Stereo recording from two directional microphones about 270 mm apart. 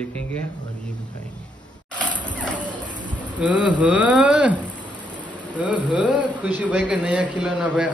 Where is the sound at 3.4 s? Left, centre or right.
Centre.